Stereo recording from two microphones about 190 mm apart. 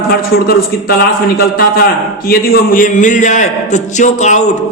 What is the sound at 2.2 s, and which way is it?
A man's voice, 45° left (ahead or behind).